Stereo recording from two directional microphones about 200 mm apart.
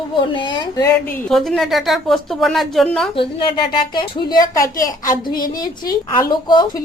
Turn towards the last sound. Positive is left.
turn(degrees=20)  # may be behind; listen again after turning